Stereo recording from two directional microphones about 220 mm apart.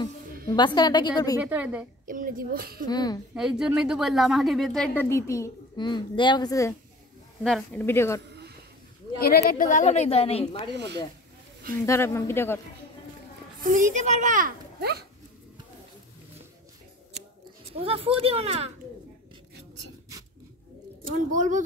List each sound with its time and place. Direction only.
0.5 s a woman's voice: 20° left (ahead or behind)
1.4 s speech: 5° right (ahead or behind)
2.0 s speech: 40° right (ahead or behind)
2.9 s speech: 20° left (ahead or behind)
3.3 s speech: 5° right (ahead or behind); by 6.7 s 15° left (ahead or behind)
7.4 s speech: 5° left (ahead or behind)
8.3 s a sound: 50° right (ahead or behind)
9.2 s a woman's voice: 45° left (ahead or behind); by 10.7 s 25° left (ahead or behind)
11.8 s speech: 10° left (ahead or behind)
13.6 s a child's voice: 35° right (ahead or behind)
17.7 s speech: 25° right (ahead or behind)
21.3 s a child's voice: 35° right (ahead or behind)